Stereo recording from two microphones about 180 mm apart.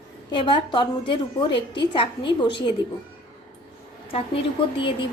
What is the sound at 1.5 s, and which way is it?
Speech, 75° left (ahead or behind).